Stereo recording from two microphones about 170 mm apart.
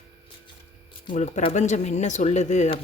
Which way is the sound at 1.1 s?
45° left (ahead or behind).